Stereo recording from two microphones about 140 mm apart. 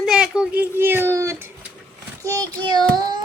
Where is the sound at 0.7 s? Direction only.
15° right (ahead or behind).